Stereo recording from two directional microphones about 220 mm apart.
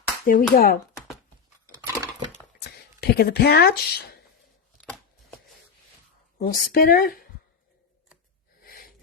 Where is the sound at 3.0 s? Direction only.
45° left (ahead or behind).